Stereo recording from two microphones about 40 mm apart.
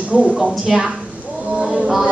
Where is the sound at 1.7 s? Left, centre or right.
Centre.